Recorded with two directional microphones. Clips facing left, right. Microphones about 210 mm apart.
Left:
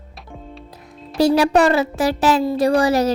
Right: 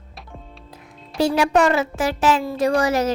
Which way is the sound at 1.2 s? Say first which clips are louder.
Left 3 dB; 35° left (ahead or behind).